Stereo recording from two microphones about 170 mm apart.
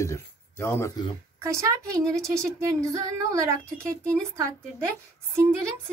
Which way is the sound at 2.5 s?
20° right (ahead or behind).